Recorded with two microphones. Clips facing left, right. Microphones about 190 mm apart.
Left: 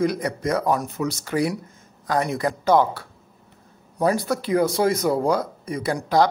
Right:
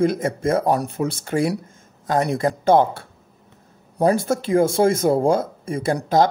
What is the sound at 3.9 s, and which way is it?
Speech, 30° right (ahead or behind).